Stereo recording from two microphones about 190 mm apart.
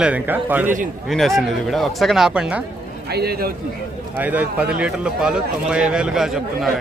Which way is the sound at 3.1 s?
55° right (ahead or behind).